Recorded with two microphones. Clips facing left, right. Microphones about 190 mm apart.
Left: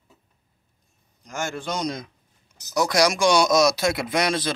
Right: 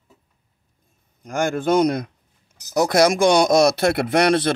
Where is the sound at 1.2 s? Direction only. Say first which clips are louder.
Right 8 dB; 55° right (ahead or behind).